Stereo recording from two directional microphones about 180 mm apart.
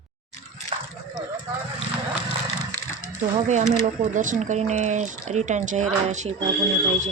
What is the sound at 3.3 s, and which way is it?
Speech, 40° right (ahead or behind).